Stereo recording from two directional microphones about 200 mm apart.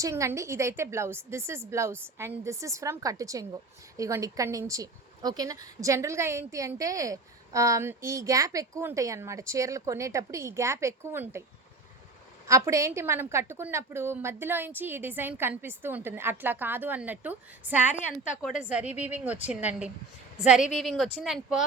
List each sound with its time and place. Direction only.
0.0 s a woman's voice: 15° right (ahead or behind)
12.5 s a woman's voice: 15° right (ahead or behind)
18.9 s speech: 35° left (ahead or behind)
19.2 s a woman's voice: 10° right (ahead or behind)